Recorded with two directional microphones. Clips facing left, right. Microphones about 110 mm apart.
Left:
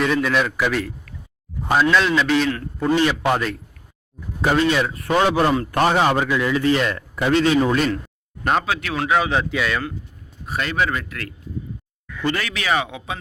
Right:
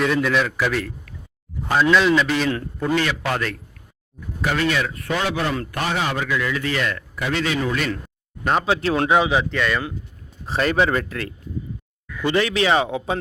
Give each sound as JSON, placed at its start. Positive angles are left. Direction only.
{"t": 0.0, "sound": "a man's voice", "side_deg": 0}
{"t": 1.9, "sound": "a man's voice", "side_deg": 0}
{"t": 2.9, "sound": "a man's voice", "side_deg": 20}
{"t": 6.2, "sound": "a man's voice", "side_deg": 25}
{"t": 8.6, "sound": "speech", "side_deg": -30}
{"t": 9.5, "sound": "a man's voice", "side_deg": 5}
{"t": 10.4, "sound": "a man's voice", "side_deg": -30}